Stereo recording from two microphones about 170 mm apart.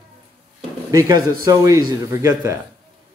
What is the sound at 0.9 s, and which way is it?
Speech, 20° right (ahead or behind).